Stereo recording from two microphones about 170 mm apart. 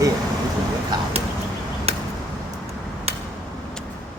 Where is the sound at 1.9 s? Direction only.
35° right (ahead or behind).